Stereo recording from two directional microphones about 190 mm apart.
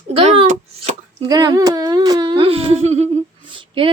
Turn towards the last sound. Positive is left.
turn(degrees=-25)  # may be behind; listen again after turning